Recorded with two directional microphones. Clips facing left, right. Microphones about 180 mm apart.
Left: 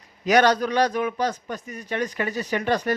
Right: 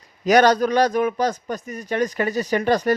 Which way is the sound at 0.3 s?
40° right (ahead or behind).